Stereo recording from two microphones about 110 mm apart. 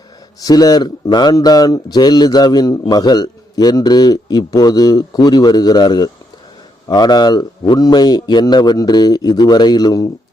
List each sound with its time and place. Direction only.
0.3 s speech: 35° left (ahead or behind)